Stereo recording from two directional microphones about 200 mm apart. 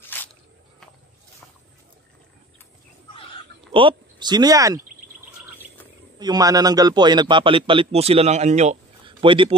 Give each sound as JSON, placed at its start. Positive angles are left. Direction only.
{"t": 0.1, "sound": "a sound", "side_deg": 10}
{"t": 3.7, "sound": "speech", "side_deg": -25}
{"t": 6.1, "sound": "a man's voice", "side_deg": -20}